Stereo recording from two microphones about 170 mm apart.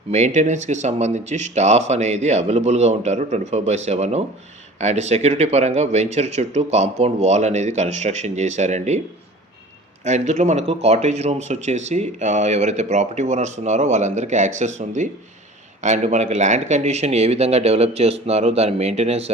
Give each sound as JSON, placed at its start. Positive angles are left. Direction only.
{"t": 0.1, "sound": "speech", "side_deg": -45}
{"t": 10.0, "sound": "speech", "side_deg": -45}